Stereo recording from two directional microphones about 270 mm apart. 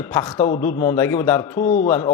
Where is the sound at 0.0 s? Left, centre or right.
Centre.